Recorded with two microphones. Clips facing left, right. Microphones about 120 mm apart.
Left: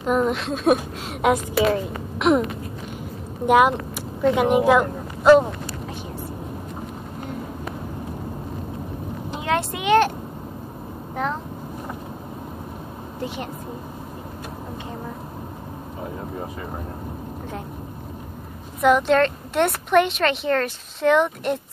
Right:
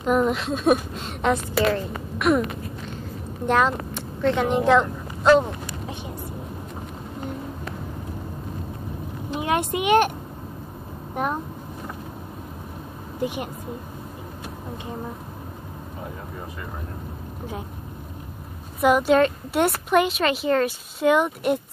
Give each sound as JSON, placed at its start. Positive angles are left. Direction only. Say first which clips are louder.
{"t": 0.0, "sound": "speech", "louder": "even", "side_deg": 0}
{"t": 2.1, "sound": "a sound", "louder": "left 2 dB", "side_deg": 20}
{"t": 3.4, "sound": "speech", "louder": "left 4 dB", "side_deg": 10}
{"t": 9.4, "sound": "a woman's voice", "louder": "right 1 dB", "side_deg": -15}
{"t": 18.8, "sound": "a woman's voice", "louder": "even", "side_deg": -5}